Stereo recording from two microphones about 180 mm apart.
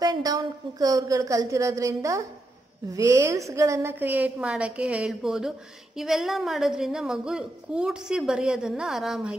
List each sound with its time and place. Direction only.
0.0 s a woman's voice: 20° right (ahead or behind); by 9.4 s 5° right (ahead or behind)